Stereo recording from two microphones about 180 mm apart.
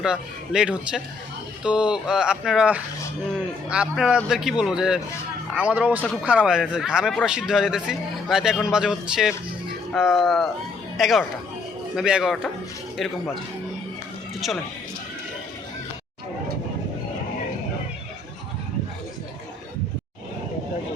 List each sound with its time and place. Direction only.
0.0 s a man's voice: 5° right (ahead or behind)
14.4 s a man's voice: centre (ahead or behind)